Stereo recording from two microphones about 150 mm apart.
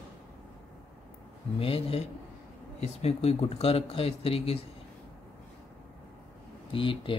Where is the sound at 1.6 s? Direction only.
40° left (ahead or behind).